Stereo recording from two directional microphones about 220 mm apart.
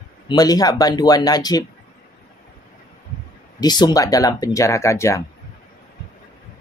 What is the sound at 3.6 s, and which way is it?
Speech, 20° left (ahead or behind).